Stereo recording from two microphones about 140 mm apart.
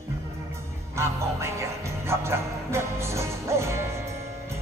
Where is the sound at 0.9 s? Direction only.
20° right (ahead or behind).